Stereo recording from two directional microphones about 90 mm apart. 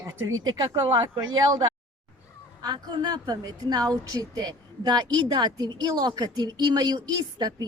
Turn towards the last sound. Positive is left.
turn(degrees=-50)  # may be behind; listen again after turning